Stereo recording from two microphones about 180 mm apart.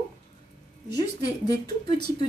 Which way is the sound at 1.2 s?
20° left (ahead or behind).